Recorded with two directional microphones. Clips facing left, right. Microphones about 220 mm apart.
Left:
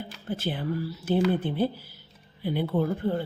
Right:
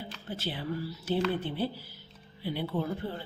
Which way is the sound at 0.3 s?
50° left (ahead or behind).